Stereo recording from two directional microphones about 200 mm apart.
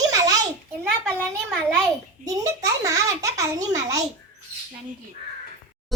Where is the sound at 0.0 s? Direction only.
15° right (ahead or behind).